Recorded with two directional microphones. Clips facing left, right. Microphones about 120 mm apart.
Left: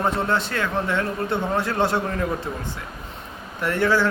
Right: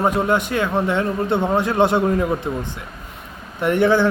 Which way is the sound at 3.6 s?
20° right (ahead or behind).